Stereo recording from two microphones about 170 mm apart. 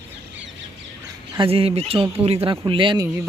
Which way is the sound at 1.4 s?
35° right (ahead or behind).